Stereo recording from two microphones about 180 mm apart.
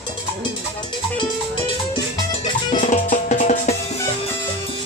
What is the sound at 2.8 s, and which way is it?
Music, 45° left (ahead or behind).